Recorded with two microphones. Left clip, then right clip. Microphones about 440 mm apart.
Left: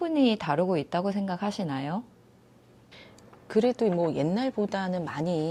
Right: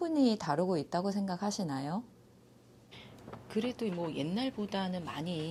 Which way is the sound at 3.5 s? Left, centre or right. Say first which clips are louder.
Left 12 dB; left.